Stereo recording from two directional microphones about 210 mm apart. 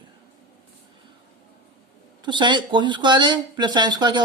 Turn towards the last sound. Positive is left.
turn(degrees=-20)  # may be behind; listen again after turning